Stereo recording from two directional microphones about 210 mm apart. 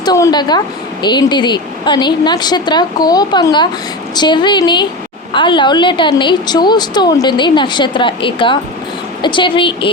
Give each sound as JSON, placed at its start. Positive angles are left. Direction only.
{"t": 0.0, "sound": "a woman's voice", "side_deg": 20}